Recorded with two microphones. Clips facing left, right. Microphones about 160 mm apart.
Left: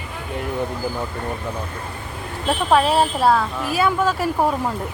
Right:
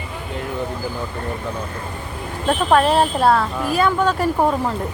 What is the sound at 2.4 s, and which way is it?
Speech, 5° left (ahead or behind).